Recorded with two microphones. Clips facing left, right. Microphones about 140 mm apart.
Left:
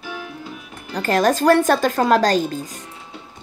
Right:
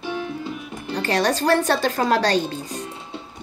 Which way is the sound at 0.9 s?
45° left (ahead or behind).